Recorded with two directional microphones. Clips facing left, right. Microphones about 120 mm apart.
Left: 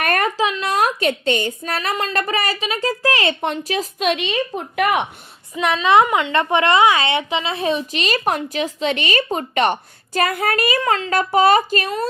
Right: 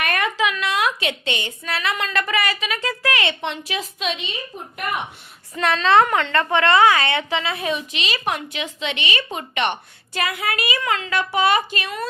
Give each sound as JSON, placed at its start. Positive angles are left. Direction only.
{"t": 0.0, "sound": "a woman's voice", "side_deg": 45}
{"t": 4.1, "sound": "a woman's voice", "side_deg": 80}
{"t": 5.5, "sound": "a woman's voice", "side_deg": 15}